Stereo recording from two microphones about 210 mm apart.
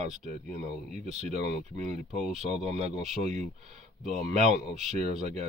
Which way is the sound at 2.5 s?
30° right (ahead or behind).